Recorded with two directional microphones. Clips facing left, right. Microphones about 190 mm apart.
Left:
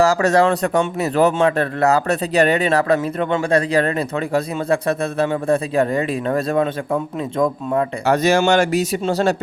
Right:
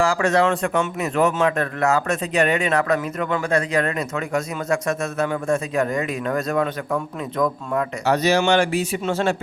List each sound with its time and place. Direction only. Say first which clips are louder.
0.0 s a man's voice: left 4 dB; 40° left (ahead or behind)
8.0 s speech: left 2 dB; 50° left (ahead or behind)